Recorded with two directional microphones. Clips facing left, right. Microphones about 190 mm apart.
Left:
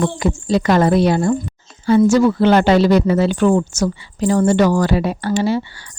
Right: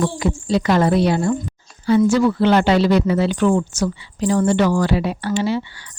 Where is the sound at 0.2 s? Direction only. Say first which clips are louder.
Left 2 dB; 45° left (ahead or behind).